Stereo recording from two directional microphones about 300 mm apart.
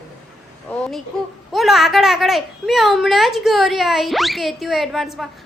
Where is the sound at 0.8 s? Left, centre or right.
Centre.